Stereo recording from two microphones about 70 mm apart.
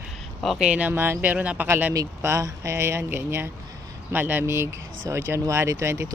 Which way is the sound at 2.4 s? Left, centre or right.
Right.